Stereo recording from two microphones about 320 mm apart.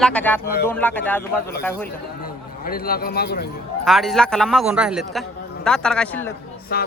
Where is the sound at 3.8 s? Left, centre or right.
Centre.